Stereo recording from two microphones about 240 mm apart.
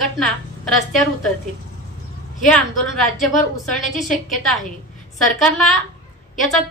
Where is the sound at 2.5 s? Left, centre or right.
Centre.